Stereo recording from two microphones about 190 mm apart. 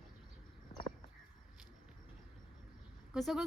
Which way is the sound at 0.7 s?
35° left (ahead or behind).